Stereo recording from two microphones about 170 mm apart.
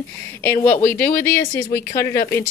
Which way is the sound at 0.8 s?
10° left (ahead or behind).